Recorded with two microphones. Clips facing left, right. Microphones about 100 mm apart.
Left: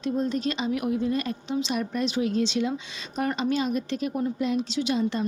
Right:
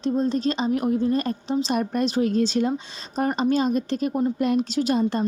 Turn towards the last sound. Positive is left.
turn(degrees=-45)  # may be behind; listen again after turning